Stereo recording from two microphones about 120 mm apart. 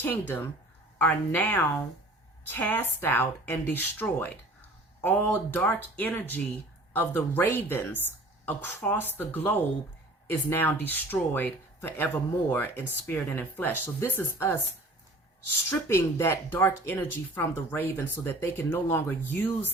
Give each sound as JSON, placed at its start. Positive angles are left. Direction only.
{"t": 0.0, "sound": "speech", "side_deg": 15}